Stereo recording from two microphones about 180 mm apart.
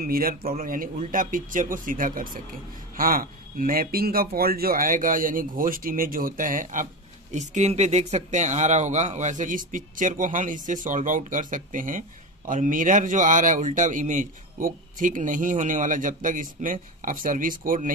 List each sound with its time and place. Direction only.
0.0 s speech: 55° right (ahead or behind)